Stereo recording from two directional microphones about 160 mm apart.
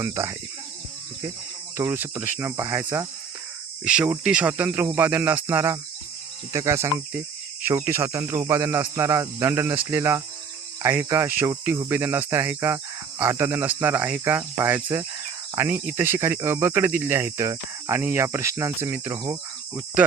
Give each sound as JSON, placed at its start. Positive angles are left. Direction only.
{"t": 0.0, "sound": "speech", "side_deg": -20}
{"t": 1.7, "sound": "speech", "side_deg": -15}